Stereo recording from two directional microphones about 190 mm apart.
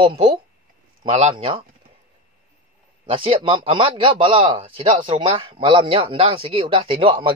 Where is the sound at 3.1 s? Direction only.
30° right (ahead or behind).